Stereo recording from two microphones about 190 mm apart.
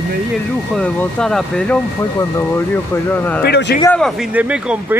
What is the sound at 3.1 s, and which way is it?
Speech, 10° left (ahead or behind).